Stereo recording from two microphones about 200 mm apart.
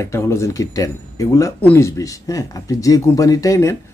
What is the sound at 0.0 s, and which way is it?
Speech, 15° left (ahead or behind).